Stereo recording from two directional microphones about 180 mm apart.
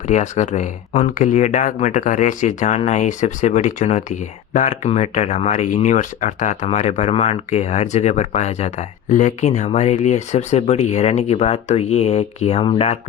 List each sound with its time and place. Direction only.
0.1 s speech: 40° left (ahead or behind)